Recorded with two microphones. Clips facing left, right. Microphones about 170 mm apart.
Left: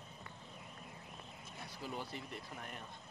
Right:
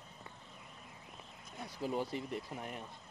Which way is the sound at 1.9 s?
20° right (ahead or behind).